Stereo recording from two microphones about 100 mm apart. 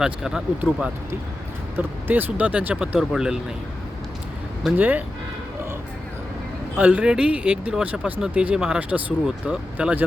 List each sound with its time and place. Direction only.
0.0 s speech: 5° right (ahead or behind)
1.7 s speech: 20° right (ahead or behind); by 3.3 s 5° right (ahead or behind)
4.8 s speech: 15° right (ahead or behind)
6.7 s speech: 15° right (ahead or behind)